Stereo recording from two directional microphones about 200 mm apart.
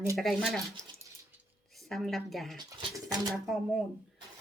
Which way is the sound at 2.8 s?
15° right (ahead or behind).